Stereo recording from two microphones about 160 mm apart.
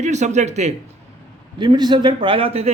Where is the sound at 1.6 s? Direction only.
30° right (ahead or behind).